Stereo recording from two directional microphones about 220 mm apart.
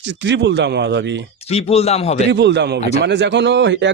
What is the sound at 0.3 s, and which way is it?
Speech, 55° right (ahead or behind).